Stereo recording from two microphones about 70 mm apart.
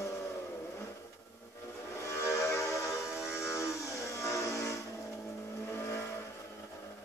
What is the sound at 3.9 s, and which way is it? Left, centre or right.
Music, left.